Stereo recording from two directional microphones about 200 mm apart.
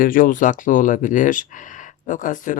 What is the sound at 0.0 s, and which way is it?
Speech, 45° left (ahead or behind).